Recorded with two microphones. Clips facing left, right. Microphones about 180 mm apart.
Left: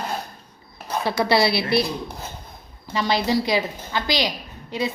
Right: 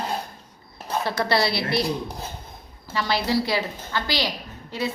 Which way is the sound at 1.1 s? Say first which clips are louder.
Left 4 dB; 15° left (ahead or behind).